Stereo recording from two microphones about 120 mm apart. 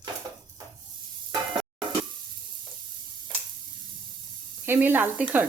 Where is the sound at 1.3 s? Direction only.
45° right (ahead or behind).